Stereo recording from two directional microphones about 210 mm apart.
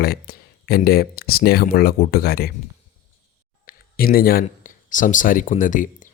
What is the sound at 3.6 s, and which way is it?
Speech, 45° left (ahead or behind).